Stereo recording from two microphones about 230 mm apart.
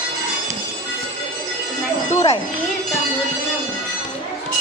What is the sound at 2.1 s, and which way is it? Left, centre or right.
Speech, left.